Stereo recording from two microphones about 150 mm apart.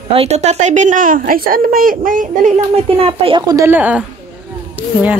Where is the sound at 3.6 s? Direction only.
10° right (ahead or behind).